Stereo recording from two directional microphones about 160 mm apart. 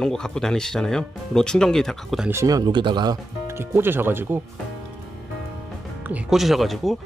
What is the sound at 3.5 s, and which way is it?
Speech, 15° right (ahead or behind).